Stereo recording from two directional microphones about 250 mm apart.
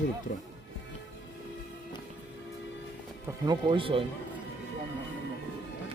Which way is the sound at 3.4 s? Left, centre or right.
Centre.